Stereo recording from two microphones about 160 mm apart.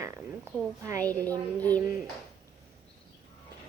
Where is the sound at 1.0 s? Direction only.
10° left (ahead or behind).